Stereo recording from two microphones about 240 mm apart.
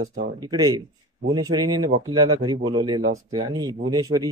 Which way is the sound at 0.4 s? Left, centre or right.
Centre.